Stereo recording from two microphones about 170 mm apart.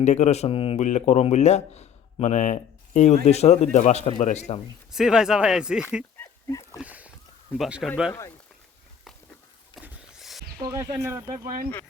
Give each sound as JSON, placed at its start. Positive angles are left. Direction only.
{"t": 0.0, "sound": "speech", "side_deg": 40}
{"t": 4.9, "sound": "speech", "side_deg": -5}
{"t": 6.5, "sound": "speech", "side_deg": 20}
{"t": 6.7, "sound": "speech", "side_deg": -10}
{"t": 9.8, "sound": "vehicle", "side_deg": 0}
{"t": 10.6, "sound": "speech", "side_deg": -15}
{"t": 11.4, "sound": "speech", "side_deg": -55}